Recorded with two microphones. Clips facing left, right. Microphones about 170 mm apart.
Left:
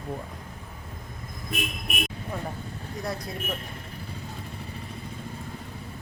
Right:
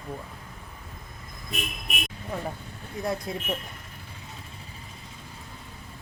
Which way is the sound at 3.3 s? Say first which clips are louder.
Right 3 dB; 20° right (ahead or behind).